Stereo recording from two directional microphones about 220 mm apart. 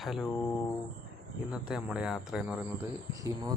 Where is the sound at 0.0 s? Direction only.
Centre (ahead or behind).